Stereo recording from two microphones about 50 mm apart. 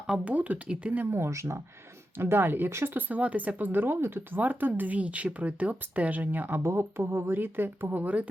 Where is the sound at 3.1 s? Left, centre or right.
Right.